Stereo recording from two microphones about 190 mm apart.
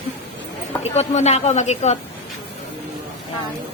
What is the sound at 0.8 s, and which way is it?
Speech, 35° left (ahead or behind).